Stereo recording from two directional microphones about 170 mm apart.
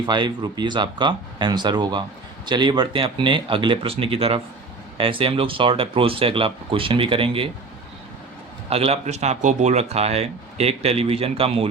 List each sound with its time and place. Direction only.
0.0 s speech: 25° right (ahead or behind)
8.7 s speech: 35° right (ahead or behind)